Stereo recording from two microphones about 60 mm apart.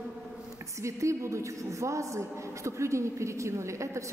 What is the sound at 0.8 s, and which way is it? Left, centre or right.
A woman's voice, right.